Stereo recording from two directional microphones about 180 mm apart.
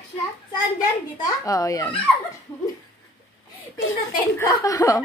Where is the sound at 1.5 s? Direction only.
20° left (ahead or behind).